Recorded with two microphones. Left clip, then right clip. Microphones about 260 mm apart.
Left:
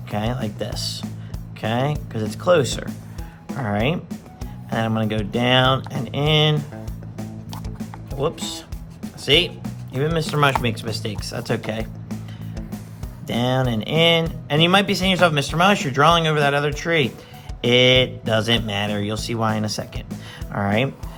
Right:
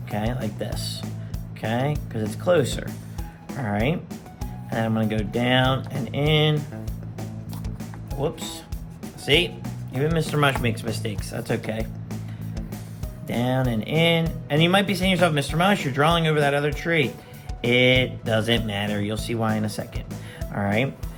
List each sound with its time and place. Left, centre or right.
0.1 s speech: centre
8.2 s speech: left
12.0 s music: centre
13.2 s speech: left